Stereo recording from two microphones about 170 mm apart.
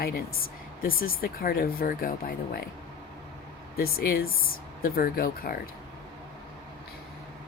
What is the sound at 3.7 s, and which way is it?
Speech, 60° left (ahead or behind).